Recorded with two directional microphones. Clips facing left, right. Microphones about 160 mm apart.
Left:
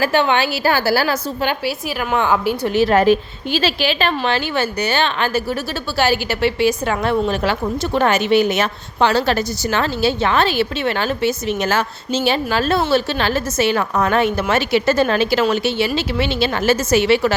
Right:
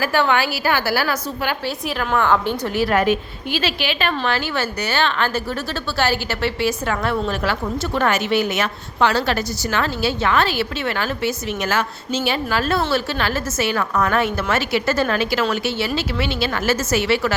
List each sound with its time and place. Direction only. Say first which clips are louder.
0.0 s a woman's voice: left 2 dB; 20° left (ahead or behind)
2.1 s a woman's voice: left 1 dB; 10° left (ahead or behind)
2.7 s a woman's voice: left 5 dB; 25° left (ahead or behind)
4.2 s a woman's voice: left 3 dB; 20° left (ahead or behind)